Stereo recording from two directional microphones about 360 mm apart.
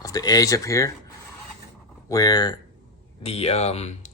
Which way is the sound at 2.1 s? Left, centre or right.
Centre.